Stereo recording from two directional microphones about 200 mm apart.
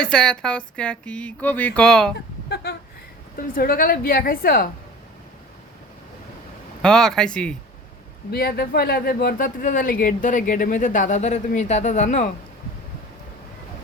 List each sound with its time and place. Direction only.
0.0 s speech: 5° left (ahead or behind)
3.5 s speech: 45° left (ahead or behind)
6.8 s speech: 5° left (ahead or behind)
8.3 s speech: 50° left (ahead or behind)